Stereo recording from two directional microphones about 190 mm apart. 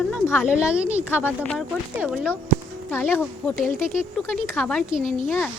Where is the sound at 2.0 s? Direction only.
5° right (ahead or behind).